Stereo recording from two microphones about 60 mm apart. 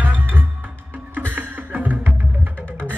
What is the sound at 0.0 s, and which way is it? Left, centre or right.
Music, right.